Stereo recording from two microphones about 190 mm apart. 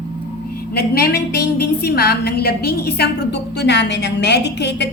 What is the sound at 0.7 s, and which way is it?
A woman's voice, 55° left (ahead or behind).